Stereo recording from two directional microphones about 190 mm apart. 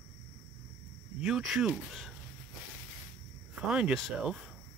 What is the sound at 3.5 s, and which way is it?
Speech, 5° right (ahead or behind).